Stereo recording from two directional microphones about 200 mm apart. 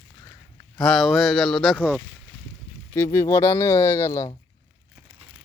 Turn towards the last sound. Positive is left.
turn(degrees=15)  # may be behind; listen again after turning